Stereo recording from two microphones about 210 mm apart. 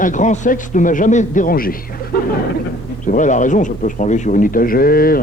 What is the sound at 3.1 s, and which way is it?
Speech, 35° left (ahead or behind).